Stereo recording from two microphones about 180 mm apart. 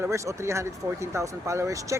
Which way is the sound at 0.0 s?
15° right (ahead or behind).